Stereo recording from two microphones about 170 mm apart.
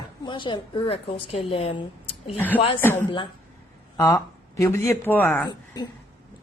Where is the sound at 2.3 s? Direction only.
10° left (ahead or behind).